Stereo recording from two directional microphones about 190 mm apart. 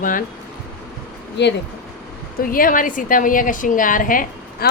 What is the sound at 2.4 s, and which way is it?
A woman's voice, 50° left (ahead or behind).